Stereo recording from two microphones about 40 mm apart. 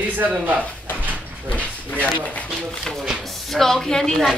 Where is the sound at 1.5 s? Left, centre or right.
Left.